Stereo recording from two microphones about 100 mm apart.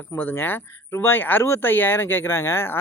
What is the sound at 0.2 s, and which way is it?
Speech, 20° left (ahead or behind).